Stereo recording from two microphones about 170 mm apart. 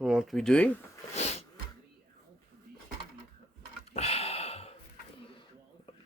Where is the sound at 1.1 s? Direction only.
40° left (ahead or behind).